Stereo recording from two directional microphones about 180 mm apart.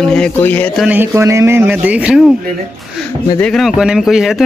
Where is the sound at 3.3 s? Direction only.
5° left (ahead or behind).